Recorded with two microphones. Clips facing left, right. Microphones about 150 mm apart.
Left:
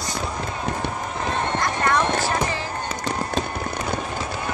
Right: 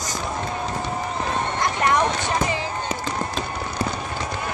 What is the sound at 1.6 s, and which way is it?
Horse, 20° right (ahead or behind).